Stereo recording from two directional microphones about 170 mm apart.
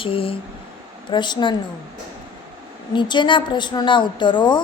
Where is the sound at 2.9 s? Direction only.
30° left (ahead or behind).